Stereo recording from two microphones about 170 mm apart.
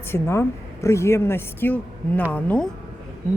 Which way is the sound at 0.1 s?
15° left (ahead or behind).